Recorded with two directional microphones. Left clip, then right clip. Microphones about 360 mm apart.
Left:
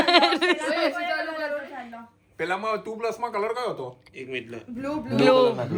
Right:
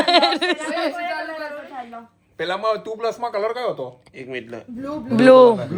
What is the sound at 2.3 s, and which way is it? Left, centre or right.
Speech, right.